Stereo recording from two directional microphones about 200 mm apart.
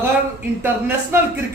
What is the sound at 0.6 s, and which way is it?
Speech, 10° right (ahead or behind).